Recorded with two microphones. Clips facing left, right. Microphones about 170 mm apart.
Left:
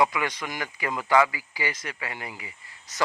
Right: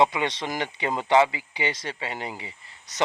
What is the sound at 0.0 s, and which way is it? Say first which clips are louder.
Speech: right 2 dB; 25° right (ahead or behind).